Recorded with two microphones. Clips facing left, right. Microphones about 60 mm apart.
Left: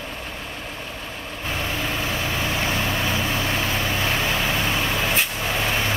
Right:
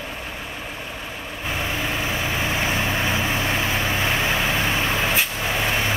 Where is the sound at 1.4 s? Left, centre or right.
Centre.